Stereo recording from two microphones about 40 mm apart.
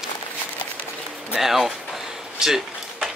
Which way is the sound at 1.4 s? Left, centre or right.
Centre.